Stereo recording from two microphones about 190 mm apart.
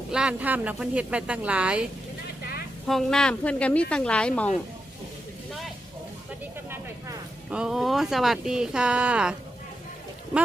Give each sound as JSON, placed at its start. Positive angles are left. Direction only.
{"t": 0.1, "sound": "speech", "side_deg": -5}
{"t": 2.4, "sound": "vehicle", "side_deg": 55}
{"t": 2.8, "sound": "speech", "side_deg": 0}
{"t": 6.7, "sound": "speech", "side_deg": -10}